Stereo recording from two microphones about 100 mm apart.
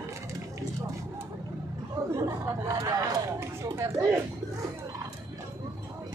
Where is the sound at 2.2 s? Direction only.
35° right (ahead or behind).